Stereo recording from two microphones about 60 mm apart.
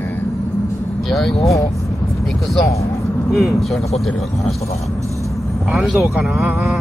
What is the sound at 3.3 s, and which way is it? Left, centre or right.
Speech, centre.